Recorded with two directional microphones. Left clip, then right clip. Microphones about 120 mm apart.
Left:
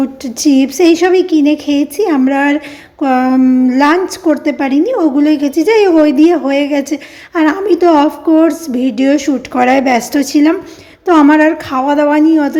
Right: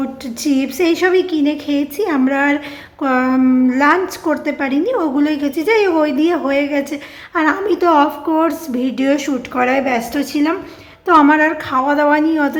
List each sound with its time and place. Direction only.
0.0 s a woman's voice: 35° left (ahead or behind)
9.6 s a woman's voice: 35° left (ahead or behind); by 12.5 s 20° left (ahead or behind)